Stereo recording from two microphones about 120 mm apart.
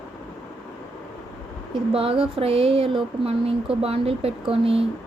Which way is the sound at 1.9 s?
50° right (ahead or behind).